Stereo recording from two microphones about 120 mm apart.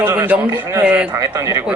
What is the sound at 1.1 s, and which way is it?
Speech, 25° right (ahead or behind).